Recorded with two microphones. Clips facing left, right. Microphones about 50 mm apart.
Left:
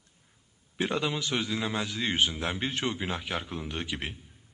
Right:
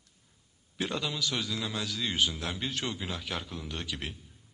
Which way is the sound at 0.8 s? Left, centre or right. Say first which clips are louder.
Left 3 dB; left.